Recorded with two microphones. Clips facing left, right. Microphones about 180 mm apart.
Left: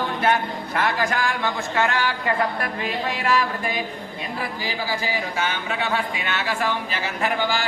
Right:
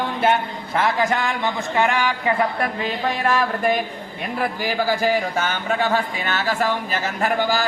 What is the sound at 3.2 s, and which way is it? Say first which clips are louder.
Speech: right 3 dB; 50° right (ahead or behind).